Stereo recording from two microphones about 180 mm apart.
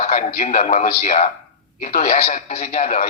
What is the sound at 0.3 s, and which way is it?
A man's voice, 40° left (ahead or behind).